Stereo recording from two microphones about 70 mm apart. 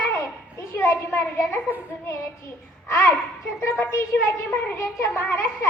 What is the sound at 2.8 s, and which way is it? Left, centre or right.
A child's voice, left.